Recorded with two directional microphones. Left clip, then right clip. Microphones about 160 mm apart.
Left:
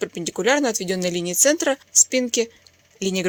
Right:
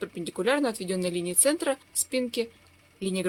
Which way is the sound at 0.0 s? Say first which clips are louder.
Left 6 dB; 35° left (ahead or behind).